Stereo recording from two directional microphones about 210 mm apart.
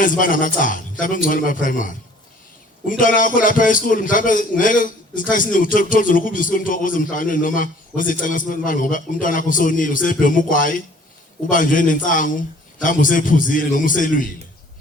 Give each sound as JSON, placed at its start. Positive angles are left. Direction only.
{"t": 0.0, "sound": "a man's voice", "side_deg": 40}
{"t": 3.0, "sound": "a man's voice", "side_deg": 40}